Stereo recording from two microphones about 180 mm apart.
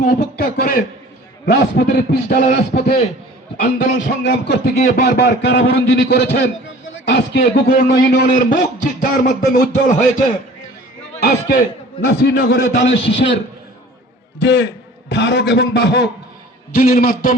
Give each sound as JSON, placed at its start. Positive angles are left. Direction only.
{"t": 0.3, "sound": "a sound", "side_deg": 55}
{"t": 3.6, "sound": "a man's voice", "side_deg": 50}
{"t": 3.9, "sound": "a sound", "side_deg": 75}
{"t": 5.4, "sound": "a man's voice", "side_deg": 75}
{"t": 8.1, "sound": "a man's voice", "side_deg": 55}
{"t": 11.2, "sound": "a sound", "side_deg": 60}
{"t": 12.0, "sound": "a man's voice", "side_deg": 75}
{"t": 14.4, "sound": "a man's voice", "side_deg": 80}
{"t": 16.8, "sound": "a man's voice", "side_deg": 50}